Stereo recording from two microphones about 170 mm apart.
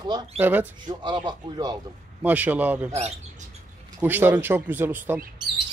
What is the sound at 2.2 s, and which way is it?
Speech, 10° right (ahead or behind).